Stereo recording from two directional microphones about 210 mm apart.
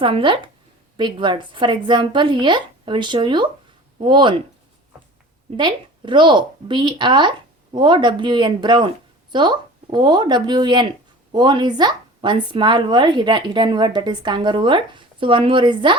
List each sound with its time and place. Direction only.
0.0 s speech: 25° right (ahead or behind)
5.5 s speech: 20° right (ahead or behind)